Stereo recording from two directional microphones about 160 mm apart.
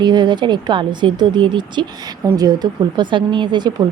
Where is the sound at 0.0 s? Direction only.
30° right (ahead or behind).